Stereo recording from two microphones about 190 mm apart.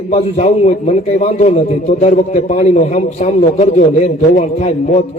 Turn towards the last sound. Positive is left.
turn(degrees=40)  # may be behind; listen again after turning